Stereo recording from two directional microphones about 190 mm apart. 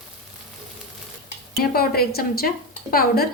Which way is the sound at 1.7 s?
55° left (ahead or behind).